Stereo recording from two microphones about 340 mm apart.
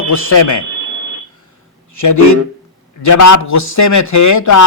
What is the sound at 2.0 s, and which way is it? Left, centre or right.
A man's voice, left.